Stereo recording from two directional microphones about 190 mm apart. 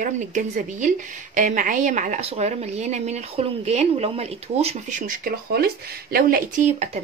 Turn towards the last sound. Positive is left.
turn(degrees=-40)  # may be behind; listen again after turning